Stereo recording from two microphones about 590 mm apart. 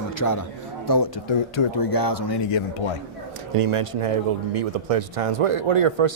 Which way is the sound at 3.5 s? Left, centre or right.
Right.